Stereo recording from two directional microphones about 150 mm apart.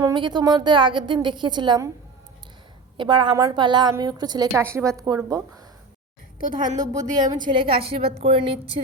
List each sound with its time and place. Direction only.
0.0 s a woman's voice: 30° right (ahead or behind)
3.0 s a woman's voice: 30° right (ahead or behind)
6.7 s a woman's voice: 25° right (ahead or behind)